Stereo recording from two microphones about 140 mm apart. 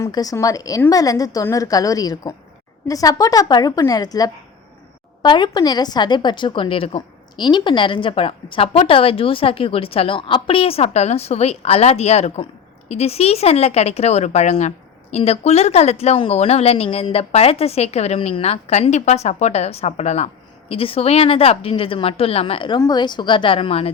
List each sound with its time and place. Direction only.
0.0 s a woman's voice: 25° left (ahead or behind); by 23.9 s 40° left (ahead or behind)